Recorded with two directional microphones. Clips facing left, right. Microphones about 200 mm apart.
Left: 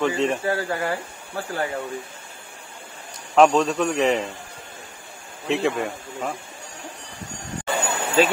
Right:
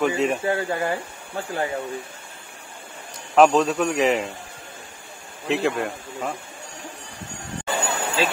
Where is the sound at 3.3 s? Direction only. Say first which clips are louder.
Even; 5° right (ahead or behind).